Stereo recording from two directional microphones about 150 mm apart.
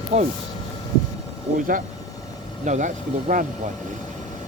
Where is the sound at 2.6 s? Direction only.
55° right (ahead or behind).